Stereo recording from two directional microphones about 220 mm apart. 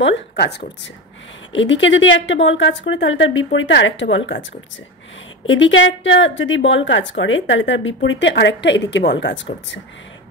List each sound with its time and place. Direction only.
0.0 s a woman's voice: 50° left (ahead or behind)
5.5 s a woman's voice: 60° left (ahead or behind)